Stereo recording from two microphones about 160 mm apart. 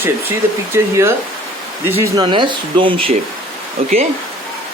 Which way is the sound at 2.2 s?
30° right (ahead or behind).